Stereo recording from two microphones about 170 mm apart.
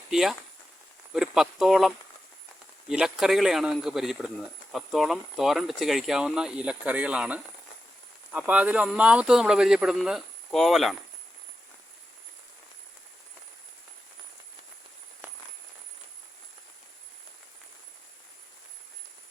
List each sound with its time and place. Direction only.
0.1 s speech: centre (ahead or behind)
2.9 s speech: 5° right (ahead or behind)